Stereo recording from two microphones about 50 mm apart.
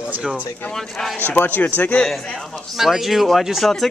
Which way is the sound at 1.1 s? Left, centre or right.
Left.